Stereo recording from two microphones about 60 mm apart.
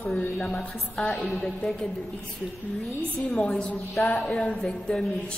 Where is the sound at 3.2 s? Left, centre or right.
Centre.